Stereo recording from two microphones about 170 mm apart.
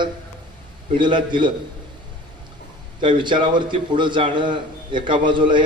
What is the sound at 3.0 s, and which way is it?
A man's voice, 30° right (ahead or behind).